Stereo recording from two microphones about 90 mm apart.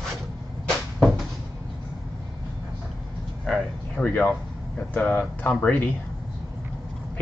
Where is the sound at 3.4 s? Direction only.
5° left (ahead or behind).